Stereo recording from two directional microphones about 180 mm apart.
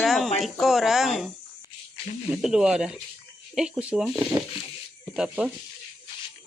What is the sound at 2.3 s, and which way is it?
Speech, 5° right (ahead or behind).